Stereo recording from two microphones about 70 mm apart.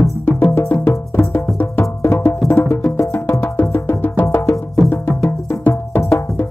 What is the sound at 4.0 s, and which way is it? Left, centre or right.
Music, left.